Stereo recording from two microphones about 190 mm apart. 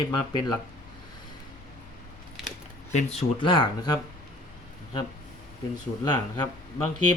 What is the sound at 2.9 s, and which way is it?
Speech, 35° left (ahead or behind).